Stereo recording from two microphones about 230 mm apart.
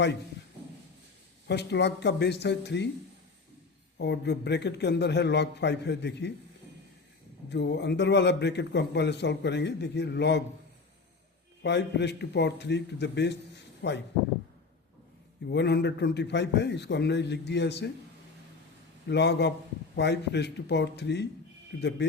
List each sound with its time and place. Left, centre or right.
1.5 s a man's voice: left
3.9 s a man's voice: left
7.5 s a man's voice: left
11.6 s a man's voice: left
15.4 s a man's voice: left
19.0 s a man's voice: left